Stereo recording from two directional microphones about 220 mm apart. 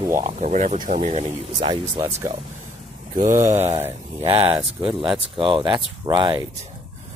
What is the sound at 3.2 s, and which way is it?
Speech, 35° right (ahead or behind).